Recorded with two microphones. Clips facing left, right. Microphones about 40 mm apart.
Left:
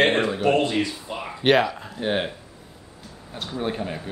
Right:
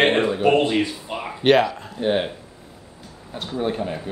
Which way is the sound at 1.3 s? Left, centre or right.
Centre.